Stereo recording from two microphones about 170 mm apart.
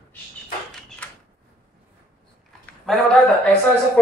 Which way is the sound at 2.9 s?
Centre (ahead or behind).